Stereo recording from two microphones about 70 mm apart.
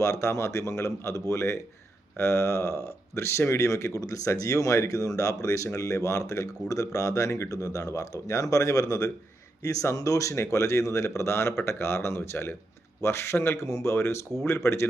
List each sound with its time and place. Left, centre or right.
0.0 s speech: left
7.5 s speech: left